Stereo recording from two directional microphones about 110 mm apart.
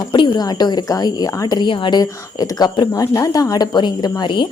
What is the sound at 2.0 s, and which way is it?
Speech, 35° left (ahead or behind).